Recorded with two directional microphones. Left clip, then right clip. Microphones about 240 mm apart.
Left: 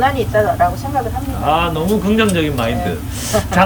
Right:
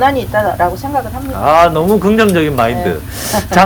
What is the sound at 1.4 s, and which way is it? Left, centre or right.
Speech, centre.